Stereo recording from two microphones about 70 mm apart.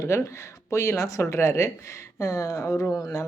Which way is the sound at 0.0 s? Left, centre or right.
Left.